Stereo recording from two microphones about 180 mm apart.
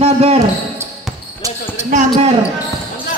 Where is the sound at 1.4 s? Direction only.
20° right (ahead or behind).